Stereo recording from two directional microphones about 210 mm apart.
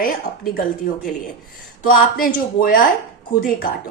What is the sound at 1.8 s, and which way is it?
A woman's voice, 45° left (ahead or behind).